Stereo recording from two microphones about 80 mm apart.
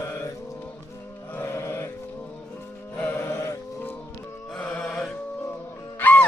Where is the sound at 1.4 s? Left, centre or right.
Left.